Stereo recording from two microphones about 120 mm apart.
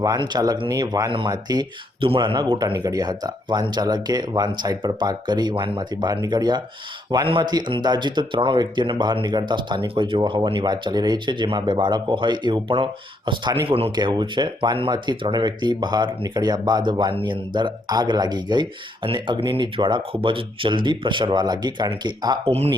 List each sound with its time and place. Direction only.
0.0 s speech: 30° right (ahead or behind)
13.7 s speech: 50° right (ahead or behind)
13.9 s speech: 35° right (ahead or behind)
22.4 s speech: 55° right (ahead or behind)